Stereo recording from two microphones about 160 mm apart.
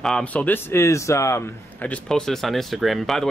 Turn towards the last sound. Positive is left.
turn(degrees=0)  # may be behind; listen again after turning